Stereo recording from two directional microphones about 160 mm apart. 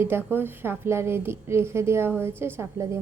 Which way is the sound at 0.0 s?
15° right (ahead or behind).